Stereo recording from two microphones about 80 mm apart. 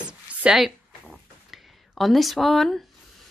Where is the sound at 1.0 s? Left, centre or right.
Centre.